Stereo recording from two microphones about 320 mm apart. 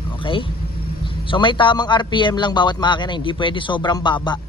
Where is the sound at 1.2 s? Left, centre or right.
Centre.